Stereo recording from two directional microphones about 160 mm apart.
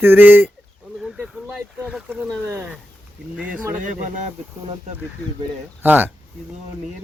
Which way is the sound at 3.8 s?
50° right (ahead or behind).